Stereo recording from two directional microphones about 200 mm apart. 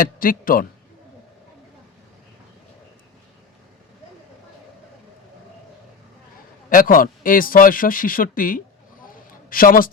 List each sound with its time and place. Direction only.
0.0 s a man's voice: 45° left (ahead or behind)
6.7 s a man's voice: 45° left (ahead or behind)